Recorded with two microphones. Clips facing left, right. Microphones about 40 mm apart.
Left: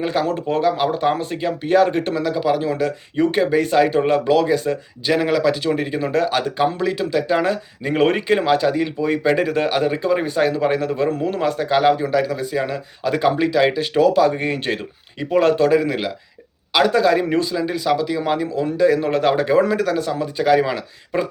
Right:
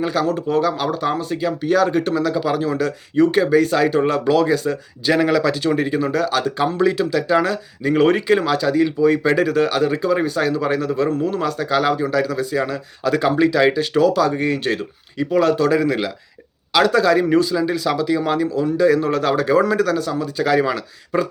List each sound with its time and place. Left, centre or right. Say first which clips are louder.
0.0 s speech: right 1 dB; centre
6.6 s speech: right 3 dB; centre; by 15.7 s left
15.7 s speech: even; centre
20.0 s speech: even; left
20.4 s speech: left 1 dB; centre